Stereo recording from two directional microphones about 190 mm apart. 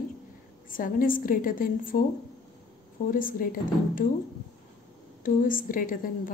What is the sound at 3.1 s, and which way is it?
Speech, 45° left (ahead or behind).